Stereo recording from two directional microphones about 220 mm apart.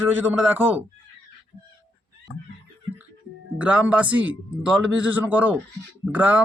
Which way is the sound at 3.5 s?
5° right (ahead or behind).